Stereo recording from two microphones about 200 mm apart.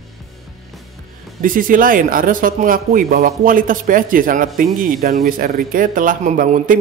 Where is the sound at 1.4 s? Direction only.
45° right (ahead or behind).